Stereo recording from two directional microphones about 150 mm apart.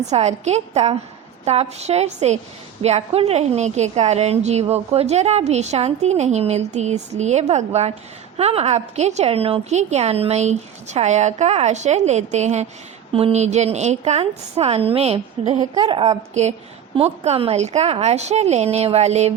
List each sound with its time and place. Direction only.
0.1 s a woman's voice: 50° right (ahead or behind)
15.7 s speech: 30° right (ahead or behind)
16.3 s a woman's voice: 50° right (ahead or behind)